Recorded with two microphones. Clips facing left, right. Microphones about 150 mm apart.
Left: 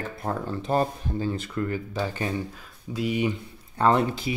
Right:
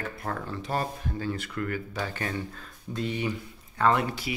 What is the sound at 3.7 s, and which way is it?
Speech, 30° left (ahead or behind).